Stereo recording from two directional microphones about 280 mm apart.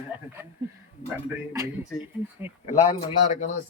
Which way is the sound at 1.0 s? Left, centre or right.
Centre.